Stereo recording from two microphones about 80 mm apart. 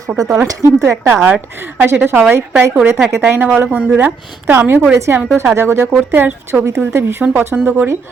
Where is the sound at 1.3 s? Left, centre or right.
Right.